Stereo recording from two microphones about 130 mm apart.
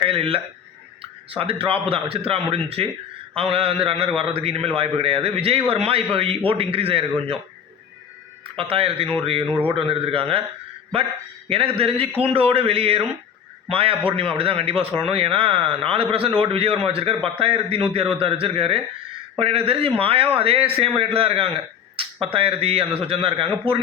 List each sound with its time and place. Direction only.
0.0 s a man's voice: 45° right (ahead or behind)
8.5 s a man's voice: 45° right (ahead or behind)
11.4 s a man's voice: 45° right (ahead or behind)